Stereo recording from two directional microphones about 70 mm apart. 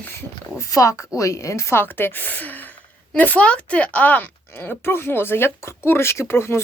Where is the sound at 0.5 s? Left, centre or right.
Left.